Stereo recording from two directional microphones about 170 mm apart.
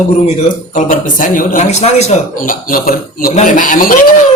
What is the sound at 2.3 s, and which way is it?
A man's voice, 55° left (ahead or behind).